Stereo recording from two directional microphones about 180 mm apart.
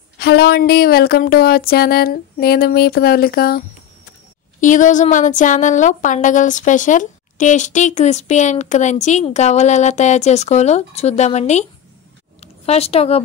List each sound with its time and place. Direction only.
0.2 s speech: 65° left (ahead or behind)
4.6 s a woman's voice: 45° left (ahead or behind)